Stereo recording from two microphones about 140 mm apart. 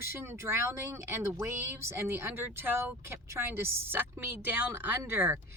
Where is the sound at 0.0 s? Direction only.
15° right (ahead or behind).